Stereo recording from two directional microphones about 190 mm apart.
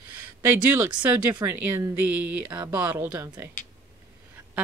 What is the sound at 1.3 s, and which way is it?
Speech, 15° right (ahead or behind).